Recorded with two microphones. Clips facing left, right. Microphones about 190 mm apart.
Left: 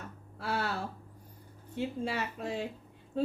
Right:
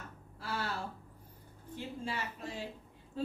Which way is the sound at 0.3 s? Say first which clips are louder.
Left 5 dB; 65° left (ahead or behind).